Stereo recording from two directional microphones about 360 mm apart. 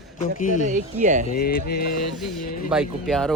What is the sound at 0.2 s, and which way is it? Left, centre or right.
Speech, left.